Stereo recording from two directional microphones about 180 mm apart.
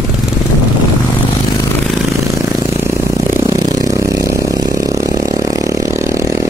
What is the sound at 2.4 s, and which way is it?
Vehicle, 15° right (ahead or behind).